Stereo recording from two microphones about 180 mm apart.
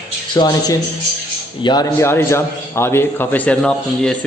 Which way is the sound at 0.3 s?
20° left (ahead or behind).